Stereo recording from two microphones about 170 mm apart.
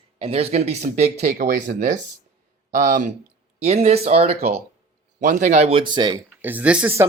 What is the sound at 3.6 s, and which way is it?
Speech, 40° right (ahead or behind).